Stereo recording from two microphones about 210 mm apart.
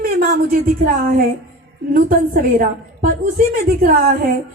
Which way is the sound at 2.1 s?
40° right (ahead or behind).